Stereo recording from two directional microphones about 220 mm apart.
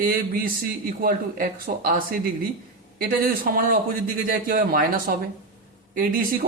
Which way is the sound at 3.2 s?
40° right (ahead or behind).